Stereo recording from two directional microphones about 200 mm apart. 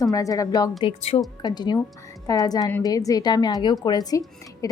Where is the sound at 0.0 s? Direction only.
15° left (ahead or behind).